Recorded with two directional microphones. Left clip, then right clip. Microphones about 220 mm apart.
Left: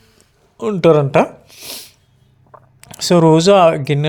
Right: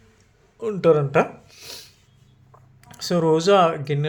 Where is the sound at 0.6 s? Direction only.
40° left (ahead or behind).